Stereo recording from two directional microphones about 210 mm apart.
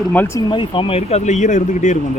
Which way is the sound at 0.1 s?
10° left (ahead or behind).